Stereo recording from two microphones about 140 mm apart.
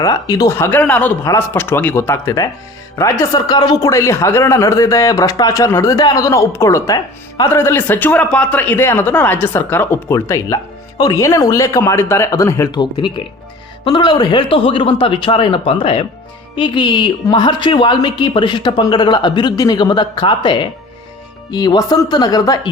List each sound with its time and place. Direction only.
0.0 s a man's voice: 25° left (ahead or behind)
12.7 s a woman's voice: 35° left (ahead or behind)